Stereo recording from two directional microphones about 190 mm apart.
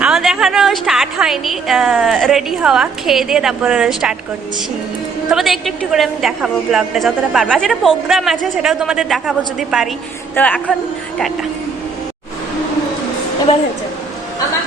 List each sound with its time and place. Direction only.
0.0 s a woman's voice: centre (ahead or behind)
5.3 s a woman's voice: centre (ahead or behind)
13.5 s a woman's voice: 30° left (ahead or behind)